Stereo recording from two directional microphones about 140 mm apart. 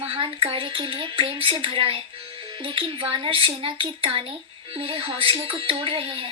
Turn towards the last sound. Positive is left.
turn(degrees=-40)  # may be behind; listen again after turning